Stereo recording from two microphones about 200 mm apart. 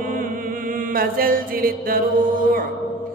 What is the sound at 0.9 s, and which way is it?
A man's voice, 45° right (ahead or behind).